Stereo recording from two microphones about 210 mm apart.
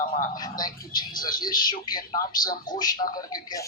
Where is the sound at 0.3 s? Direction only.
20° left (ahead or behind).